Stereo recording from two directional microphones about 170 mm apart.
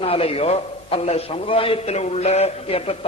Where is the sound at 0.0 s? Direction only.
35° left (ahead or behind).